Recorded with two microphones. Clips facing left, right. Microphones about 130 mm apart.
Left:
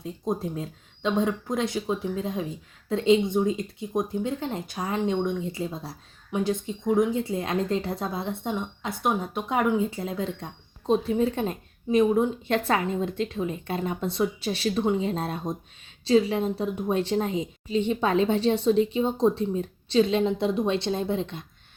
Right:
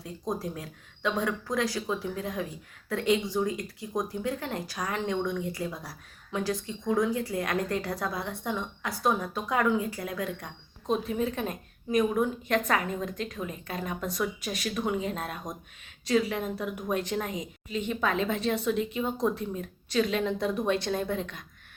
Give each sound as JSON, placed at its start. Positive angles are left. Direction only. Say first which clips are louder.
{"t": 0.0, "sound": "speech", "louder": "left 4 dB", "side_deg": 25}